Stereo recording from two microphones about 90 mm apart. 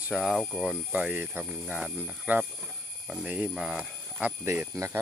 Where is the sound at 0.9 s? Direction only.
15° right (ahead or behind).